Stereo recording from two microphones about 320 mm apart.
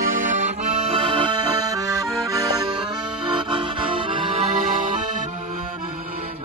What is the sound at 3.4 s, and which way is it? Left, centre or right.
Accordion, centre.